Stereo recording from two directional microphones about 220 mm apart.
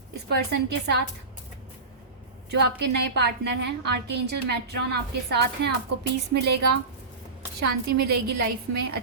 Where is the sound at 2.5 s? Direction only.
50° right (ahead or behind).